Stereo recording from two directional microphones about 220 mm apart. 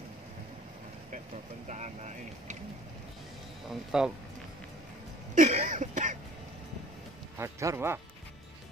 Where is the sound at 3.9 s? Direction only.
5° right (ahead or behind).